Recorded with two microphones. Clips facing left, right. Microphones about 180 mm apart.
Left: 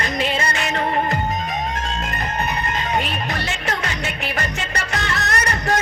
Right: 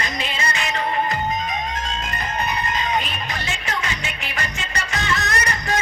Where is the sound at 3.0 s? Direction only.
60° left (ahead or behind).